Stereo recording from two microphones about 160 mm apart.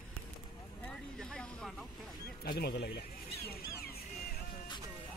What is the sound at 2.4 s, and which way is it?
Speech, 80° left.